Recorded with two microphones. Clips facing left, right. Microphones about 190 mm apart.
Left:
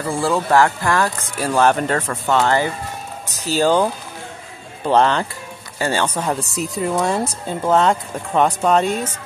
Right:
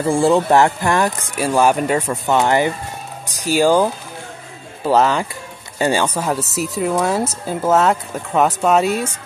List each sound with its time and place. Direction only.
0.1 s speech: 20° right (ahead or behind)